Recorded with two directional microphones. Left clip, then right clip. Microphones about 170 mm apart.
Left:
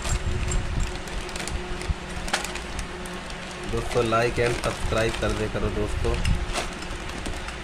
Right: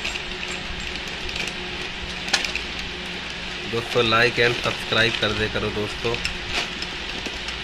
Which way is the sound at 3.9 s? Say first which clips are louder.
Right 4 dB; 15° left (ahead or behind).